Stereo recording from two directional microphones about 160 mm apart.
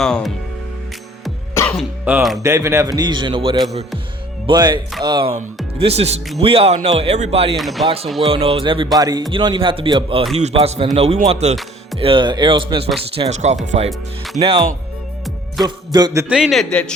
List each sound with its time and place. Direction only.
0.0 s a man's voice: 5° left (ahead or behind)
1.7 s speech: 5° right (ahead or behind)
2.4 s a man's voice: 20° right (ahead or behind)
5.8 s speech: 40° right (ahead or behind)
7.5 s a man's voice: centre (ahead or behind)
8.3 s a man's voice: 35° right (ahead or behind)
11.9 s speech: 35° right (ahead or behind)
13.1 s speech: 40° right (ahead or behind)
15.6 s a man's voice: 25° right (ahead or behind)
16.3 s a man's voice: 5° right (ahead or behind)